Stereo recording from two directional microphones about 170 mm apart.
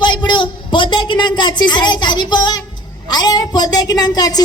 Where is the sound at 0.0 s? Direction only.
25° left (ahead or behind).